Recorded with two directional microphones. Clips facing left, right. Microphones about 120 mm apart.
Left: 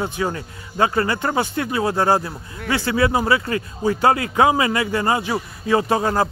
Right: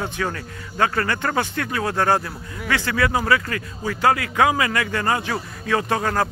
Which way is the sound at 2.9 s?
25° left (ahead or behind).